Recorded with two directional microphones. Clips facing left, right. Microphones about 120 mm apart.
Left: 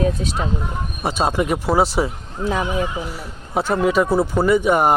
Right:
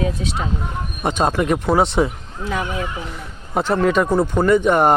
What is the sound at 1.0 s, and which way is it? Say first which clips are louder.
A man's voice: right 1 dB; 5° left (ahead or behind).